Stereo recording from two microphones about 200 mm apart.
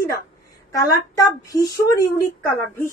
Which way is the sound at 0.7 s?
15° left (ahead or behind).